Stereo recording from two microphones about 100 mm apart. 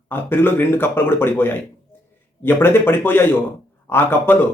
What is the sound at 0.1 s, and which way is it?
A man's voice, 20° left (ahead or behind).